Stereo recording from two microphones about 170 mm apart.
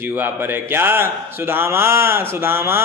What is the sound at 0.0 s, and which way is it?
Speech, 10° right (ahead or behind).